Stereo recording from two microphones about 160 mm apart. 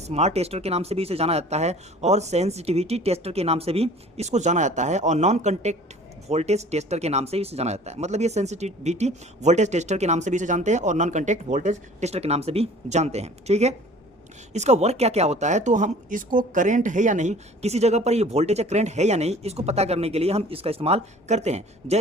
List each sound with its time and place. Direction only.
0.0 s speech: 45° right (ahead or behind)